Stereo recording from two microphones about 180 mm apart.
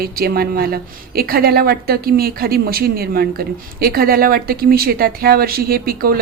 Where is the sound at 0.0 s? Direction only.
55° right (ahead or behind).